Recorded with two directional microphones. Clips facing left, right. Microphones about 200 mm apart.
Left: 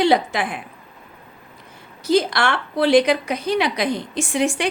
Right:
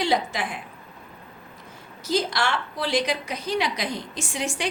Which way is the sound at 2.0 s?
60° left (ahead or behind).